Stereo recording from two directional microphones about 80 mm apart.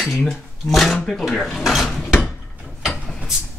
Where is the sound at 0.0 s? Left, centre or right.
Centre.